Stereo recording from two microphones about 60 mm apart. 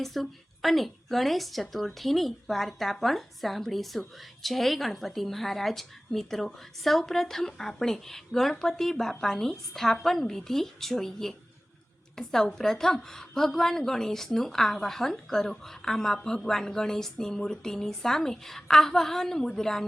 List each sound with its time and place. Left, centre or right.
0.0 s a woman's voice: centre